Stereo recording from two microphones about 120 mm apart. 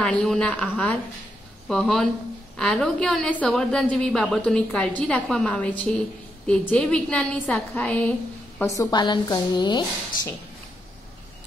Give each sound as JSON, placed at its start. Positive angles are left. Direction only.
{"t": 0.0, "sound": "a woman's voice", "side_deg": 5}
{"t": 8.6, "sound": "a woman's voice", "side_deg": 25}
{"t": 9.0, "sound": "speech", "side_deg": 40}